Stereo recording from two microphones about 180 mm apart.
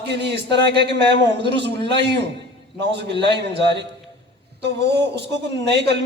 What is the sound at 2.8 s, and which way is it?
A man's voice, 70° right (ahead or behind).